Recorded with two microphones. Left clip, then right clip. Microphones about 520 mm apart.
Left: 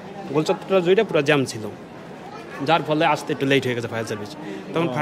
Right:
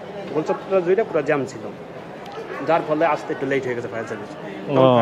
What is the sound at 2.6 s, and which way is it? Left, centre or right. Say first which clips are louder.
A man's voice: even; left.